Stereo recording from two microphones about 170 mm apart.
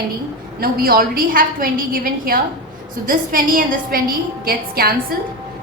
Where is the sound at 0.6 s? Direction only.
60° right (ahead or behind).